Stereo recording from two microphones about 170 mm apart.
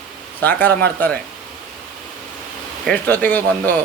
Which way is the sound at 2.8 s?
10° left (ahead or behind).